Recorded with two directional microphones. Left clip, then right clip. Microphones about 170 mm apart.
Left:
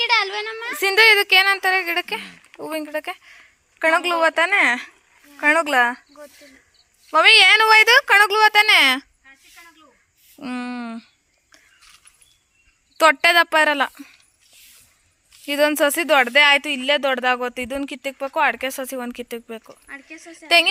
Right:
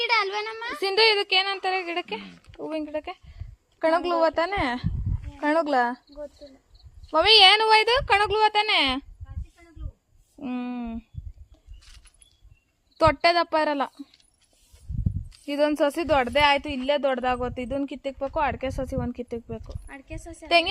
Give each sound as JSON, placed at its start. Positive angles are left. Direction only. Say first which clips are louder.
{"t": 0.0, "sound": "a sound", "louder": "left 4 dB", "side_deg": -70}
{"t": 0.8, "sound": "a woman's voice", "louder": "left 7 dB", "side_deg": 5}
{"t": 10.4, "sound": "a woman's voice", "louder": "left 3 dB", "side_deg": 0}
{"t": 13.0, "sound": "a woman's voice", "louder": "left 6 dB", "side_deg": 0}
{"t": 15.4, "sound": "a woman's voice", "louder": "left 5 dB", "side_deg": 5}
{"t": 19.5, "sound": "speech", "louder": "left 3 dB", "side_deg": 10}
{"t": 19.9, "sound": "speech", "louder": "left 4 dB", "side_deg": -15}
{"t": 20.5, "sound": "a woman's voice", "louder": "left 5 dB", "side_deg": 5}